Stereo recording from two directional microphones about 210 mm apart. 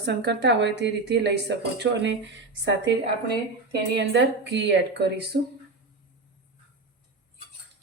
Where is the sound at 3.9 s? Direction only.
55° right (ahead or behind).